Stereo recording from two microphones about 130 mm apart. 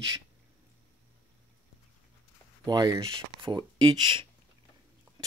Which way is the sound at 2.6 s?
30° right (ahead or behind).